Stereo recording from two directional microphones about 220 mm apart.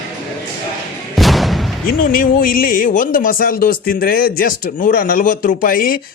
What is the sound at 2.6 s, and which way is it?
Speech, 40° left (ahead or behind).